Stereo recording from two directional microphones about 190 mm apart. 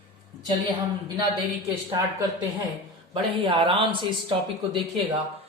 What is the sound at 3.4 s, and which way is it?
Speech, 25° right (ahead or behind).